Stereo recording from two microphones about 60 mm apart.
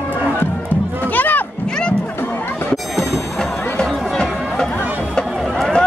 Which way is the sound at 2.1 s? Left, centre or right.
Left.